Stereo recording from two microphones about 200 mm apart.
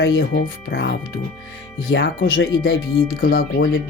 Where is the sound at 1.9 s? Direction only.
55° left (ahead or behind).